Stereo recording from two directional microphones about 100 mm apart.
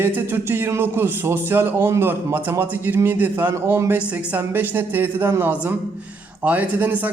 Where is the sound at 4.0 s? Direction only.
10° right (ahead or behind).